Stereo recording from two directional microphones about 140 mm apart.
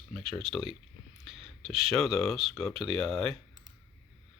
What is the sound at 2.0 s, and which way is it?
Speech, centre (ahead or behind).